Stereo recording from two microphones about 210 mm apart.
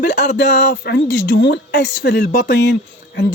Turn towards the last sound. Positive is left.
turn(degrees=55)  # may be behind; listen again after turning